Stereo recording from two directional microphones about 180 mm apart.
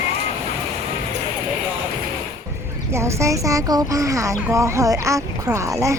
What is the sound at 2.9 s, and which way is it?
Speech, 15° right (ahead or behind).